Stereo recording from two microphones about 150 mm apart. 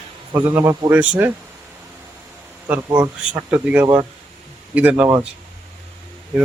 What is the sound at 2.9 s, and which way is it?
Speech, 25° right (ahead or behind).